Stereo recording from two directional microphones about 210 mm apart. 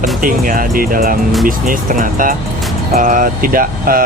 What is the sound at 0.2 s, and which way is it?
Speech, 40° right (ahead or behind).